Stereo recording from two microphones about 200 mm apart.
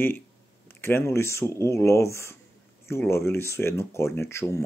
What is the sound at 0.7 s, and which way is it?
Speech, 10° left (ahead or behind).